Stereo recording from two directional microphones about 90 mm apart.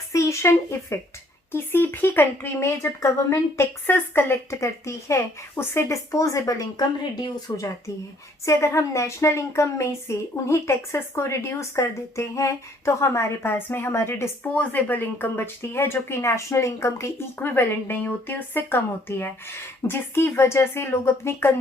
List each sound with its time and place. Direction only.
0.1 s speech: 35° left (ahead or behind)